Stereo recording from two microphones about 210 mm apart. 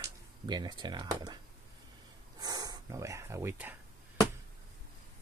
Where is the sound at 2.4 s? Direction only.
20° right (ahead or behind).